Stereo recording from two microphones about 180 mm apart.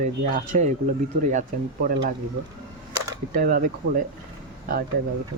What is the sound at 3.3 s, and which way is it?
Speech, 55° right (ahead or behind).